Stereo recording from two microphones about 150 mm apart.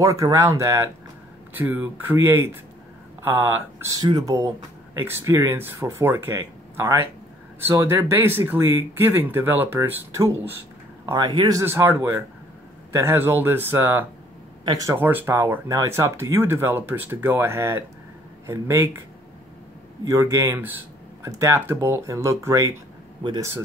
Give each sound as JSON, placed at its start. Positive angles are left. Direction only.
{"t": 0.0, "sound": "speech", "side_deg": -25}
{"t": 3.9, "sound": "speech", "side_deg": -25}
{"t": 20.1, "sound": "speech", "side_deg": -20}